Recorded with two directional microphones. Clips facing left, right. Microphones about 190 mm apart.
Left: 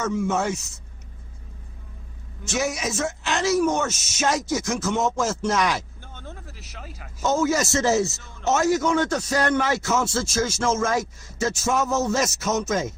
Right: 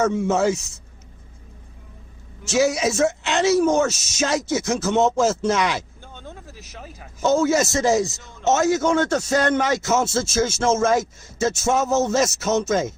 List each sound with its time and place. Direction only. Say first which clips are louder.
0.0 s a man's voice: right 4 dB; 30° right (ahead or behind)
0.4 s speech: right 7 dB; 90° right
2.7 s a man's voice: right 7 dB; 30° right (ahead or behind)
7.0 s a man's voice: right 3 dB; 30° right (ahead or behind)